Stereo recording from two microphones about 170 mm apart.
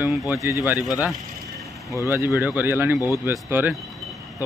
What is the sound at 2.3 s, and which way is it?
Speech, 5° right (ahead or behind).